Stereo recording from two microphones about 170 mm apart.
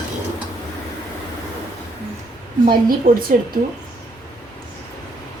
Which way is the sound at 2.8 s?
55° right (ahead or behind).